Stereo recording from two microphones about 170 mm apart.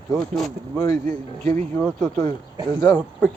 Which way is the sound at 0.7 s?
20° left (ahead or behind).